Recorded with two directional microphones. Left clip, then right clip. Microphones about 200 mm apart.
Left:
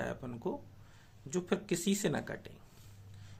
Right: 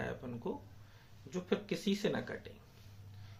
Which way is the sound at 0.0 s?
40° left (ahead or behind).